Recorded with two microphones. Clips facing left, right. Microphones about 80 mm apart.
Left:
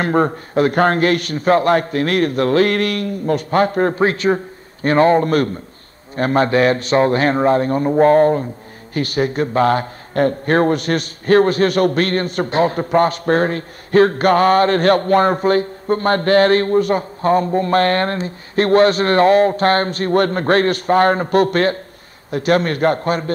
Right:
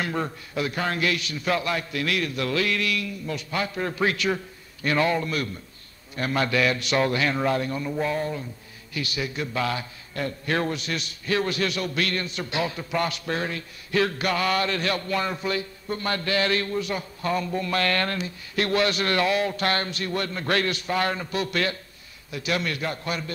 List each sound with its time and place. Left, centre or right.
0.0 s a man's voice: left